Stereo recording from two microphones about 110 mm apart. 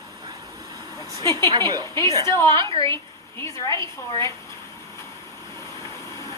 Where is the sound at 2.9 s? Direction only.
25° left (ahead or behind).